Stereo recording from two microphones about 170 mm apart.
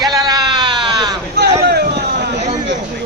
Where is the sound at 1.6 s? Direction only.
70° right (ahead or behind).